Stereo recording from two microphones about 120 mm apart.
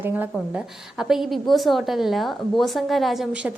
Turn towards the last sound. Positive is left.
turn(degrees=0)  # may be behind; listen again after turning